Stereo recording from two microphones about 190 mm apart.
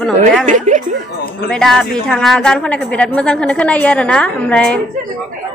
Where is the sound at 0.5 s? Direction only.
40° right (ahead or behind).